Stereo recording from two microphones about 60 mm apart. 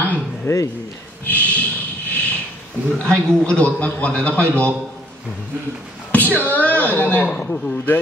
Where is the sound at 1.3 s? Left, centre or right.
Left.